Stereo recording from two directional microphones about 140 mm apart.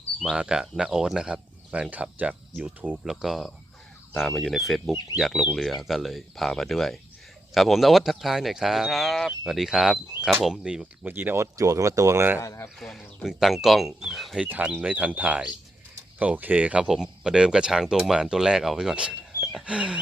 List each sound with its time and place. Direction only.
0.2 s speech: 5° right (ahead or behind)
12.4 s speech: 20° left (ahead or behind)
12.8 s speech: centre (ahead or behind)
14.4 s speech: 10° right (ahead or behind)